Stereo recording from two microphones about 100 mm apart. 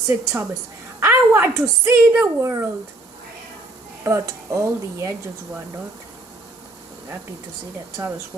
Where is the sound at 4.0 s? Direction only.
30° right (ahead or behind).